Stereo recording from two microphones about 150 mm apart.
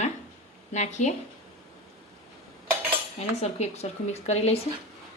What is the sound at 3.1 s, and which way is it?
A woman's voice, 45° left (ahead or behind).